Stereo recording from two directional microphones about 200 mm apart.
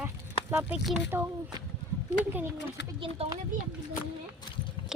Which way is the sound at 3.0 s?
25° right (ahead or behind).